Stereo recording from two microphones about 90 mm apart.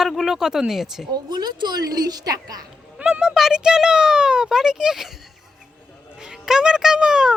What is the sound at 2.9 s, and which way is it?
A child's voice, 10° right (ahead or behind).